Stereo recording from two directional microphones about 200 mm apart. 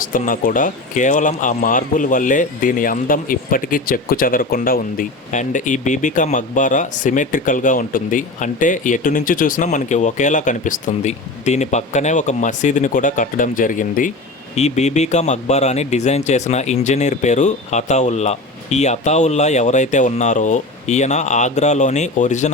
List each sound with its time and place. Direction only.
0.1 s speech: 40° left (ahead or behind)